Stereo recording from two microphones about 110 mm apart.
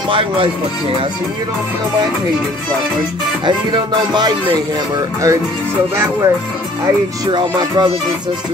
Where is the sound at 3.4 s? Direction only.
45° right (ahead or behind).